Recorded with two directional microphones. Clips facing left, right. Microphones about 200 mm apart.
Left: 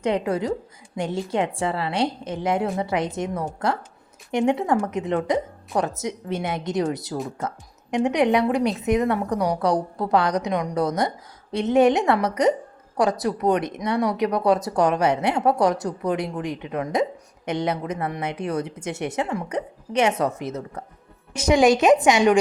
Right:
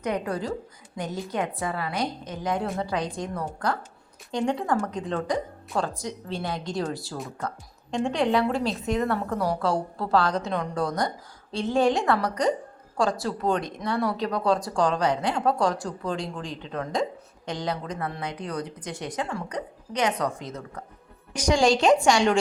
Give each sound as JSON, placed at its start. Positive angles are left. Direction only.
{"t": 0.0, "sound": "a woman's voice", "side_deg": 25}